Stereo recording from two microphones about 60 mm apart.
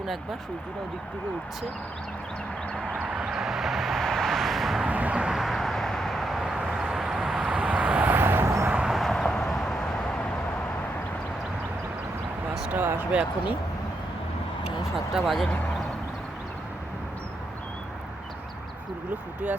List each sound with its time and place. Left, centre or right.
2.7 s vehicle: centre
4.9 s vehicle: right
5.3 s vehicle: centre
6.5 s vehicle: centre
8.1 s vehicle: right
8.9 s a sound: centre
12.7 s speech: right
13.1 s speech: centre
14.9 s speech: centre